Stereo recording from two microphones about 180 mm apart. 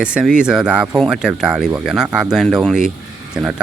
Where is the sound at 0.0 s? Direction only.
5° right (ahead or behind).